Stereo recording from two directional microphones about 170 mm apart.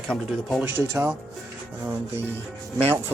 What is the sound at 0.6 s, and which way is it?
Speech, 10° right (ahead or behind).